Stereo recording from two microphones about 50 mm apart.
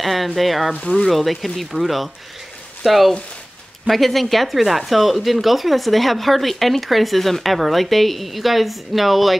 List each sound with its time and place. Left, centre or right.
0.0 s speech: centre
0.7 s speech: centre
1.0 s speech: centre